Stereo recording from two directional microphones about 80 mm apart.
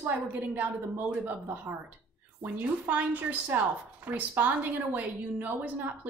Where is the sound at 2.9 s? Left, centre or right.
Right.